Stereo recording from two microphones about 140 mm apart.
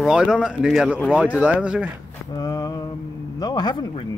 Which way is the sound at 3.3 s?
30° left (ahead or behind).